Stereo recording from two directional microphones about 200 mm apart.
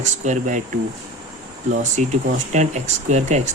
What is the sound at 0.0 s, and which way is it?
Speech, 35° right (ahead or behind).